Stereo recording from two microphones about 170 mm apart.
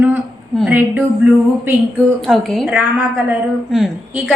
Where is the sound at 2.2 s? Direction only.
Centre (ahead or behind).